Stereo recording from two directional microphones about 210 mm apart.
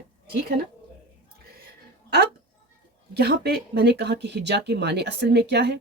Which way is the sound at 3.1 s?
50° right (ahead or behind).